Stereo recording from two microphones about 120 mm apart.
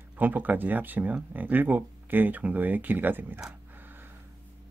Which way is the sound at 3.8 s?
15° right (ahead or behind).